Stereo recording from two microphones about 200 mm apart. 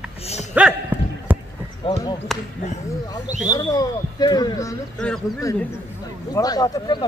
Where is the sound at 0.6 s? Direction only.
5° right (ahead or behind).